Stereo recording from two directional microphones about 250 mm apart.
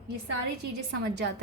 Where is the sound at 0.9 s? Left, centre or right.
Right.